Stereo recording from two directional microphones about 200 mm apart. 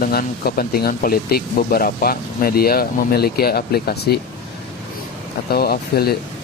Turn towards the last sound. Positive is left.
turn(degrees=50)  # may be behind; listen again after turning